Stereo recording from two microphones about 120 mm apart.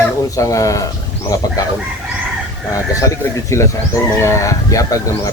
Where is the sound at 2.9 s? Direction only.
25° left (ahead or behind).